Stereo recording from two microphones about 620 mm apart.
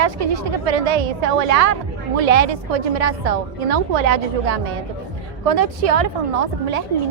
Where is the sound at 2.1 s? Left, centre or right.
Right.